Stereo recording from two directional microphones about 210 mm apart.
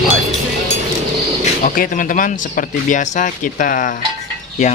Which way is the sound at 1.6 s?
40° left (ahead or behind).